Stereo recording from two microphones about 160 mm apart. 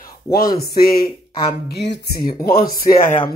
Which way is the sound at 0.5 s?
75° left (ahead or behind).